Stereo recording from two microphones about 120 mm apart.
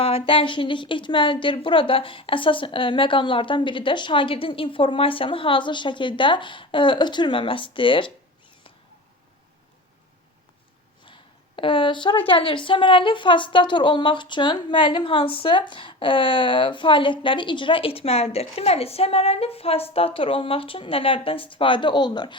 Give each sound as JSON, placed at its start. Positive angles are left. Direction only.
{"t": 0.0, "sound": "a woman's voice", "side_deg": 50}
{"t": 11.0, "sound": "a sound", "side_deg": 45}
{"t": 12.3, "sound": "a woman's voice", "side_deg": 45}